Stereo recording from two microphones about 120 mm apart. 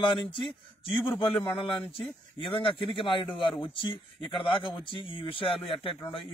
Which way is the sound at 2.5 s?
45° left (ahead or behind).